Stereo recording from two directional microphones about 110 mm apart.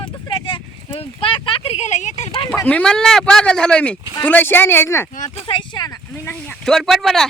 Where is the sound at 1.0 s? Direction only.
55° left (ahead or behind); by 2.3 s 90° left.